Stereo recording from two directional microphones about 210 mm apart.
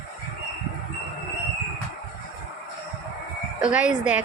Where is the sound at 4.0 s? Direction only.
5° right (ahead or behind).